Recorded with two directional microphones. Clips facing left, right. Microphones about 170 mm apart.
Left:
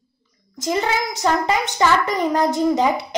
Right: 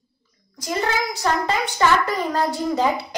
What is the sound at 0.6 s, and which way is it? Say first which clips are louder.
A child's voice: left 2 dB; 20° left (ahead or behind).